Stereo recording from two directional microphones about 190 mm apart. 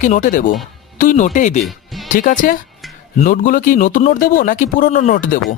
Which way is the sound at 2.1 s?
45° left (ahead or behind).